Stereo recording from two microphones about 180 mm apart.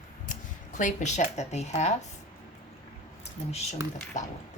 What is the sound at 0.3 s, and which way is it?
Speech, 45° left (ahead or behind).